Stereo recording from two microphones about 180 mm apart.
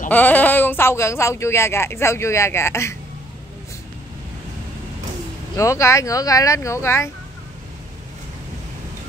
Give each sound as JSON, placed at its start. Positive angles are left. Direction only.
{"t": 0.1, "sound": "speech", "side_deg": 10}
{"t": 5.6, "sound": "speech", "side_deg": 15}